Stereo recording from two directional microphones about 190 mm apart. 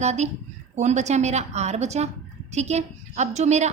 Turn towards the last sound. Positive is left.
turn(degrees=-35)  # may be behind; listen again after turning